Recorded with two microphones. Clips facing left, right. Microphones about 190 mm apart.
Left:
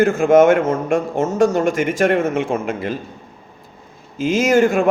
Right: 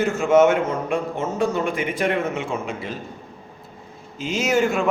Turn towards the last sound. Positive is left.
turn(degrees=50)  # may be behind; listen again after turning